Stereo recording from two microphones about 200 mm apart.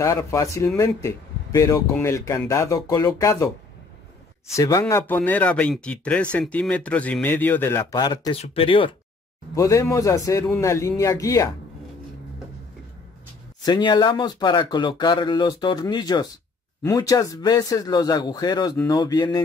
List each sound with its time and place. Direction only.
0.0 s speech: 15° left (ahead or behind)
4.6 s speech: 15° left (ahead or behind)
9.6 s speech: 15° left (ahead or behind)
13.6 s speech: 20° left (ahead or behind)